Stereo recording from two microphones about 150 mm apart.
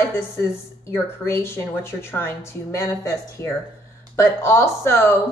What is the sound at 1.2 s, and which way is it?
A woman's voice, 15° left (ahead or behind).